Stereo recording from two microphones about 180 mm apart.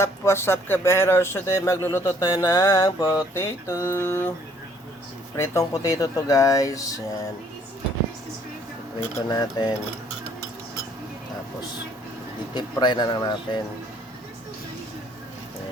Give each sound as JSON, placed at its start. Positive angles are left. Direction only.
{"t": 0.0, "sound": "speech", "side_deg": 15}
{"t": 5.4, "sound": "speech", "side_deg": 15}
{"t": 9.0, "sound": "speech", "side_deg": 20}
{"t": 12.5, "sound": "speech", "side_deg": 25}